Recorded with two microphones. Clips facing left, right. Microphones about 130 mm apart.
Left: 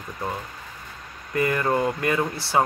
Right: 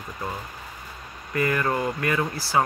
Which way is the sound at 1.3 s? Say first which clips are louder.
Left 2 dB; 25° left (ahead or behind).